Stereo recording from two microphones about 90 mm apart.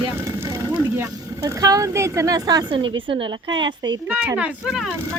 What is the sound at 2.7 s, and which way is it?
Speech, 65° right (ahead or behind).